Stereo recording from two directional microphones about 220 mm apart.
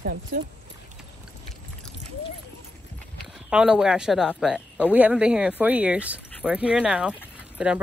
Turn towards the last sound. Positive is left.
turn(degrees=-5)  # may be behind; listen again after turning